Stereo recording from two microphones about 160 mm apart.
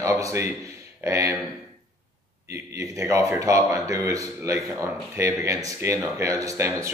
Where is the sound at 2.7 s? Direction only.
20° right (ahead or behind).